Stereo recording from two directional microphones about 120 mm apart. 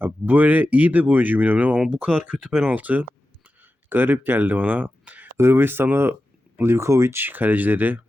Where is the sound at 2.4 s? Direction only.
Centre (ahead or behind).